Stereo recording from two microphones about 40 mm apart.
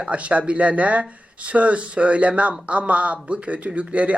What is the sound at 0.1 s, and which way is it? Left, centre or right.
Speech, right.